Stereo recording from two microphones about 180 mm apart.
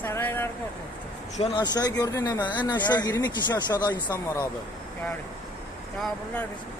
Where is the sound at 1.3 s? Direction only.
35° left (ahead or behind).